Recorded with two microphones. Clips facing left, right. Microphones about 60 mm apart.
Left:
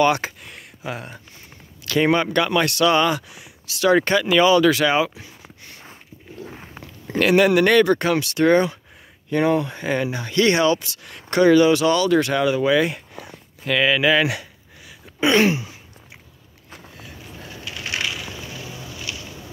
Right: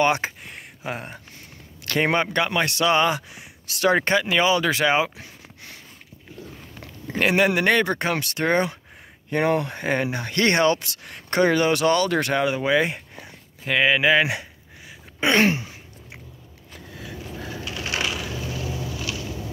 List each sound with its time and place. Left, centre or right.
0.0 s a sound: right
1.9 s speech: right
2.3 s speech: right
3.6 s speech: right
3.9 s speech: right
6.4 s biting: left
7.1 s speech: right
9.3 s speech: right
11.1 s speech: right